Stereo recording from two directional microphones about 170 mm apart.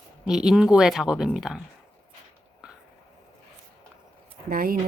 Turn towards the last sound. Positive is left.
turn(degrees=-60)  # may be behind; listen again after turning